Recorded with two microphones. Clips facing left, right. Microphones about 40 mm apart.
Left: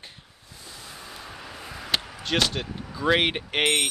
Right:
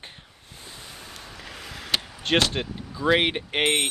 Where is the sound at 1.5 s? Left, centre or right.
Right.